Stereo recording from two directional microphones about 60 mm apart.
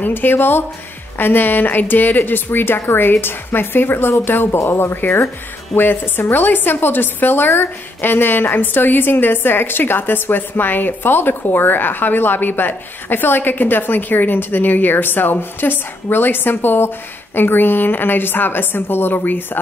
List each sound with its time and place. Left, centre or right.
0.0 s a woman's voice: left